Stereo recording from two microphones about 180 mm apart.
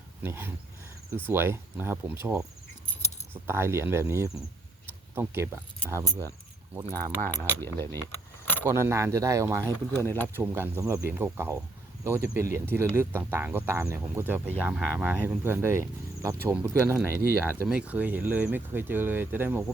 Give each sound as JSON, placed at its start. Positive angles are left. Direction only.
{"t": 0.2, "sound": "speech", "side_deg": -10}
{"t": 7.3, "sound": "speech", "side_deg": 15}
{"t": 8.6, "sound": "speech", "side_deg": -15}
{"t": 10.0, "sound": "speech", "side_deg": 10}
{"t": 10.3, "sound": "speech", "side_deg": -15}